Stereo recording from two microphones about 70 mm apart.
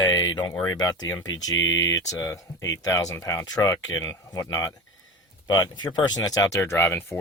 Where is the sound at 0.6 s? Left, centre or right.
Left.